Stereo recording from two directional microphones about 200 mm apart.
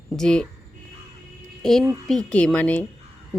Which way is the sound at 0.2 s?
5° left (ahead or behind).